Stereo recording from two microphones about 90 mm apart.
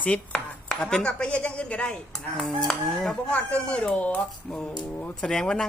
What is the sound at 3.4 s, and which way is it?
A woman's voice, 15° left (ahead or behind).